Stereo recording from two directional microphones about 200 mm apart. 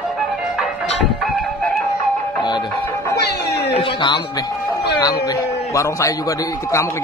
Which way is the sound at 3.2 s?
55° left (ahead or behind).